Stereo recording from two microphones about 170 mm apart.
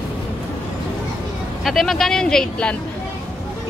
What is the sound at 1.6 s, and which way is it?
Speech, centre (ahead or behind).